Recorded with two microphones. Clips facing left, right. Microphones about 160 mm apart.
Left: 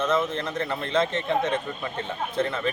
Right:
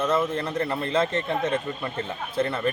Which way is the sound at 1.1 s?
30° left (ahead or behind).